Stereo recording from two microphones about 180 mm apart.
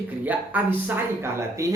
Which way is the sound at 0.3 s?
10° right (ahead or behind).